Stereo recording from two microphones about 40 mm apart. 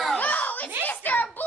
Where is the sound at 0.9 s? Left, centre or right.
Left.